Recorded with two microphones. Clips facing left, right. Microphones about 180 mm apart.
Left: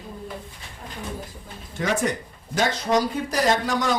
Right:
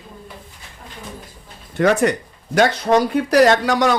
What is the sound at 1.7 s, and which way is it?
Speech, 65° right (ahead or behind).